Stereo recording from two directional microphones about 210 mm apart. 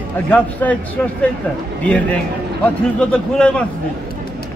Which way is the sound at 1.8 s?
5° left (ahead or behind).